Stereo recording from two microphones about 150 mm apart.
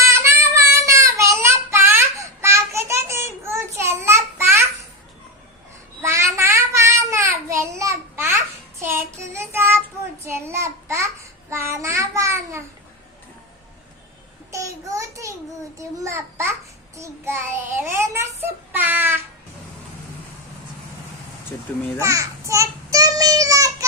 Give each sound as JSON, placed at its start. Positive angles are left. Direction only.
{"t": 0.1, "sound": "child singing", "side_deg": -20}
{"t": 6.0, "sound": "child singing", "side_deg": -20}
{"t": 14.5, "sound": "child singing", "side_deg": -20}
{"t": 15.8, "sound": "a sound", "side_deg": -20}
{"t": 17.0, "sound": "child singing", "side_deg": -20}
{"t": 22.0, "sound": "child singing", "side_deg": -20}